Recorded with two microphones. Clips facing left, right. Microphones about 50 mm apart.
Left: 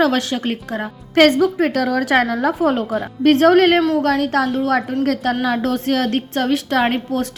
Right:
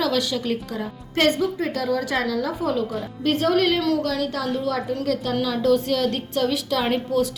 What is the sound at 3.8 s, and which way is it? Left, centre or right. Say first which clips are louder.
Speech: left 5 dB; left.